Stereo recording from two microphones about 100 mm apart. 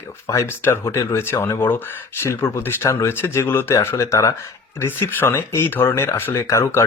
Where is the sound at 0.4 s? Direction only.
25° left (ahead or behind).